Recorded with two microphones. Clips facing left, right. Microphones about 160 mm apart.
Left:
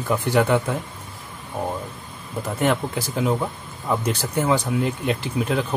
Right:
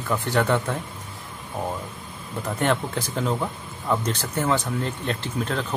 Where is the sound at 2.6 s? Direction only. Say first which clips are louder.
Left 2 dB; 5° left (ahead or behind).